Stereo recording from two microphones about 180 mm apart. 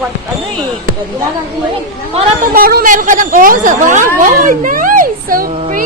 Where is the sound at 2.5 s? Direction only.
55° right (ahead or behind).